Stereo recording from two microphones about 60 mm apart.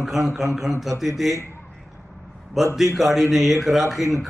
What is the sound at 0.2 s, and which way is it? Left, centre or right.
Speech, centre.